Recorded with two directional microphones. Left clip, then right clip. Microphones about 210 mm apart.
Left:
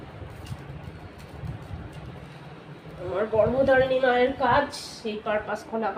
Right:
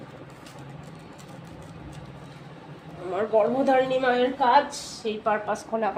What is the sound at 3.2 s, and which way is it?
A woman's voice, 30° right (ahead or behind).